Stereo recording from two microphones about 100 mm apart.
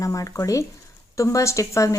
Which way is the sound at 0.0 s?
35° left (ahead or behind).